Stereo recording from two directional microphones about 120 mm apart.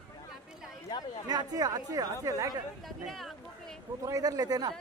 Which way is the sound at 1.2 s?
35° right (ahead or behind).